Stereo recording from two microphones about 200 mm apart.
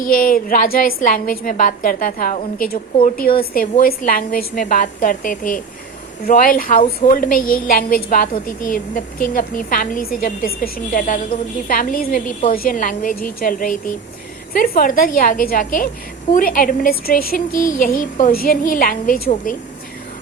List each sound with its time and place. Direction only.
0.1 s a woman's voice: 45° left (ahead or behind)